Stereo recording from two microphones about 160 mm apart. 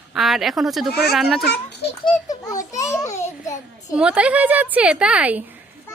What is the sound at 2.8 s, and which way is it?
Speech, 20° left (ahead or behind).